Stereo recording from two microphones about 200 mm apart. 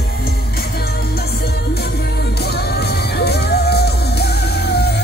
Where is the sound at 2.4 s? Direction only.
55° left (ahead or behind).